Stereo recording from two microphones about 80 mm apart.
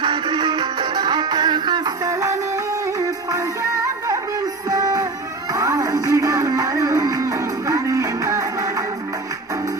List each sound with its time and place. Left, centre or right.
0.0 s music: right
2.0 s music: right